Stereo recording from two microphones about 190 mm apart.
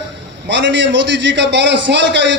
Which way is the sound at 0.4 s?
70° right (ahead or behind).